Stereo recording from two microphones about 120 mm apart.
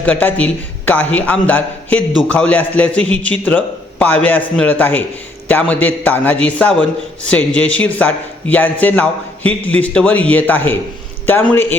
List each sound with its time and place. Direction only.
0.0 s a man's voice: 15° left (ahead or behind)